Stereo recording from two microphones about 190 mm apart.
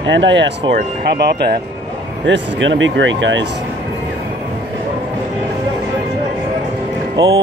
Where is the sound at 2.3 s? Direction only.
75° right (ahead or behind).